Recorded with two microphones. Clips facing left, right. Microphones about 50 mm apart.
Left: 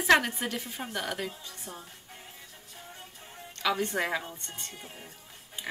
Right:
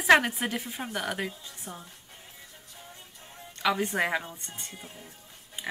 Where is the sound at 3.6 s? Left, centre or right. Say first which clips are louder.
Right 2 dB; centre.